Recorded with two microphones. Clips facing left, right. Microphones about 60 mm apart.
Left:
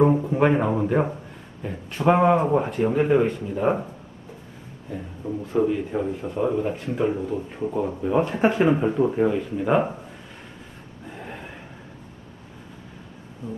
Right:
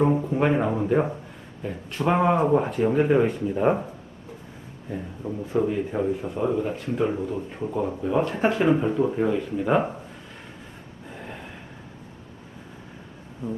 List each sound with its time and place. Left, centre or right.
0.1 s speech: centre
4.9 s speech: centre
11.1 s a sound: centre